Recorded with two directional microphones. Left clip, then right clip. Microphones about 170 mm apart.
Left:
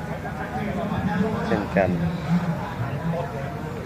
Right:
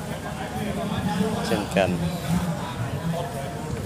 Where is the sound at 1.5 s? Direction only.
20° right (ahead or behind).